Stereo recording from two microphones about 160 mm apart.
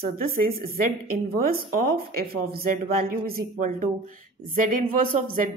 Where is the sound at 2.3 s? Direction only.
70° right (ahead or behind).